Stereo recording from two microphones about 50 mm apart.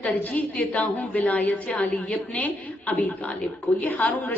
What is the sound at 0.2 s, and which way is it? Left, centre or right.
A woman's voice, left.